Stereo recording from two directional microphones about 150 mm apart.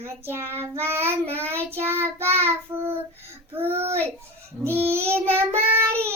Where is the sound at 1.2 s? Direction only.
40° right (ahead or behind).